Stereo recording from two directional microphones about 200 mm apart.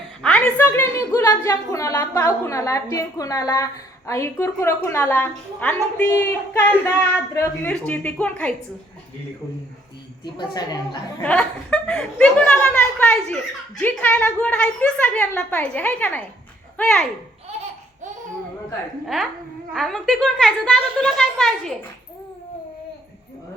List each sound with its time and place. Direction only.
0.2 s a woman's voice: 5° left (ahead or behind)
10.3 s a woman's voice: 20° left (ahead or behind)
11.2 s a woman's voice: 5° left (ahead or behind)
19.0 s speech: centre (ahead or behind)